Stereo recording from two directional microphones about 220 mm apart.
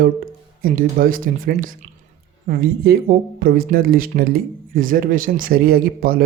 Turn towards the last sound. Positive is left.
turn(degrees=-40)  # may be behind; listen again after turning